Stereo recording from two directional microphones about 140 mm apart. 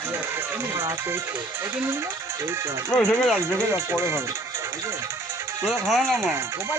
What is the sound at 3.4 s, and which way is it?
Speech, 15° right (ahead or behind).